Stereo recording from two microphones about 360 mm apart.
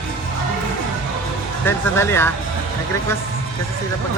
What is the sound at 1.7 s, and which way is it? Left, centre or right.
Speech, centre.